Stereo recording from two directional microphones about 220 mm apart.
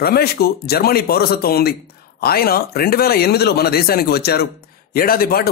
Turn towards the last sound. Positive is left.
turn(degrees=45)  # may be behind; listen again after turning